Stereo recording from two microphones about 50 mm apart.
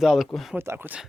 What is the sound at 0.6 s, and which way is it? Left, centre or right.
Speech, right.